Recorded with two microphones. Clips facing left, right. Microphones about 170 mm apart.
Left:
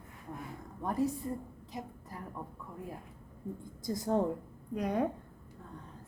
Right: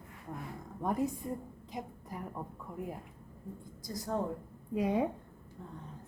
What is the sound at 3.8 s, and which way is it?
Speech, 25° left (ahead or behind).